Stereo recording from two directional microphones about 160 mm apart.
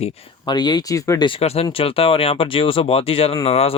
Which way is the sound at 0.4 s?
25° left (ahead or behind).